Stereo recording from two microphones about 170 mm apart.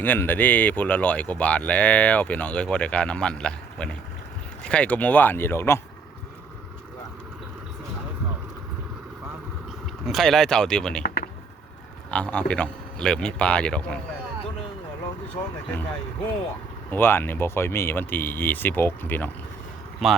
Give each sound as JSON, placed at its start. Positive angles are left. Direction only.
{"t": 0.0, "sound": "speech", "side_deg": 10}
{"t": 10.1, "sound": "speech", "side_deg": 0}
{"t": 11.0, "sound": "a sound", "side_deg": 60}
{"t": 12.1, "sound": "speech", "side_deg": 5}
{"t": 15.5, "sound": "speech", "side_deg": 10}
{"t": 20.0, "sound": "speech", "side_deg": 0}